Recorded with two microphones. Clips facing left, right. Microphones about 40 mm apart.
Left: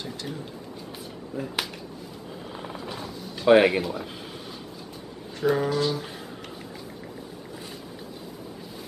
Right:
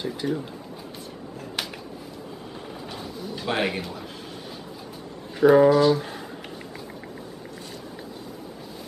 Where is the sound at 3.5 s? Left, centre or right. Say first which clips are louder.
Left 8 dB; centre.